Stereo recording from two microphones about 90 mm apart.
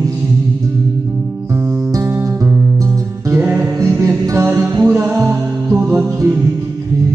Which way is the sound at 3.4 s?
25° right (ahead or behind).